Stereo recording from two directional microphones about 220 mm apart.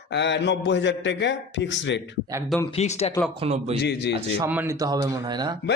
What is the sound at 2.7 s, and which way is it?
Speech, 30° left (ahead or behind).